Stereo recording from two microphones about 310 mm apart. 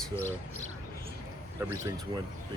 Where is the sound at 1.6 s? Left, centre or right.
Centre.